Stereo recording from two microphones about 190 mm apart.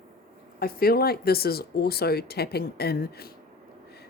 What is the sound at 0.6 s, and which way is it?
Speech, 55° left (ahead or behind).